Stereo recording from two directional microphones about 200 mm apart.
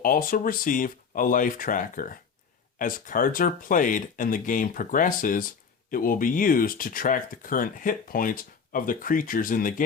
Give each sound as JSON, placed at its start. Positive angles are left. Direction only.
{"t": 0.0, "sound": "speech", "side_deg": 45}